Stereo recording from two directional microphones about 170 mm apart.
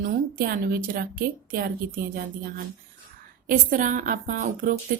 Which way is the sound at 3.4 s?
55° right (ahead or behind).